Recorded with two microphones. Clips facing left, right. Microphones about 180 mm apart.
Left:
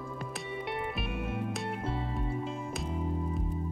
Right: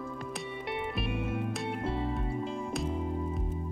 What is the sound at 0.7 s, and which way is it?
Music, centre (ahead or behind).